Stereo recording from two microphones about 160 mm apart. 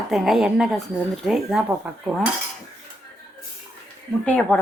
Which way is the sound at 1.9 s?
10° right (ahead or behind).